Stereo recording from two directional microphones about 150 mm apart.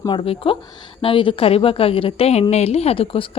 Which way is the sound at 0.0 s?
35° left (ahead or behind).